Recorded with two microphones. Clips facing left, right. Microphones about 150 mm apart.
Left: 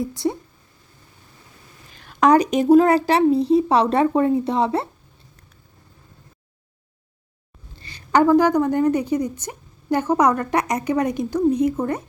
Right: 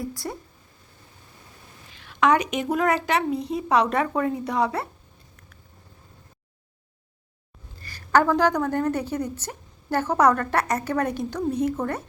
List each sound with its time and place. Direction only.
0.2 s a woman's voice: 15° left (ahead or behind)
1.9 s a woman's voice: 45° left (ahead or behind); by 4.9 s 25° left (ahead or behind)
7.8 s a sound: 20° left (ahead or behind)
8.2 s a woman's voice: 10° left (ahead or behind)